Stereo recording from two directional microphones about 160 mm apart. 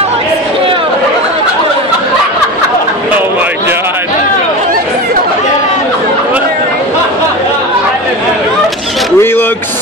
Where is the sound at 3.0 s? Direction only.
10° right (ahead or behind).